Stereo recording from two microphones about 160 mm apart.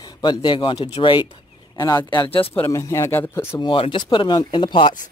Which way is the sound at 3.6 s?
30° left (ahead or behind).